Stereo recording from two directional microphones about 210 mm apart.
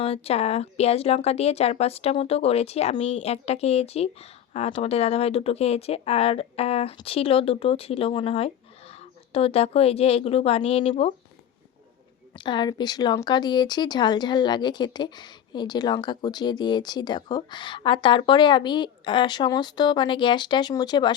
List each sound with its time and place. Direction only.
0.0 s speech: 30° left (ahead or behind)
12.3 s speech: 20° left (ahead or behind)